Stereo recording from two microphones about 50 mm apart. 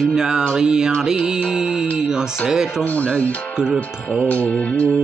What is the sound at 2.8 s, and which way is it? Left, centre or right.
Speech, left.